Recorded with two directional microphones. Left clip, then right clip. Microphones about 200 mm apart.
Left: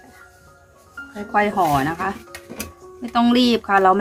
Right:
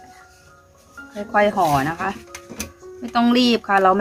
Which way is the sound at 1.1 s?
10° right (ahead or behind).